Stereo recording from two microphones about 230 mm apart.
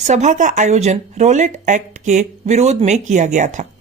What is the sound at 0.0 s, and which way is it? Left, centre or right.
Speech, right.